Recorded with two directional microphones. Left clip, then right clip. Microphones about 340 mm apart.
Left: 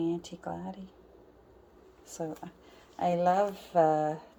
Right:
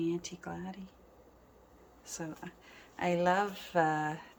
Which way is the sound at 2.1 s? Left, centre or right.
Centre.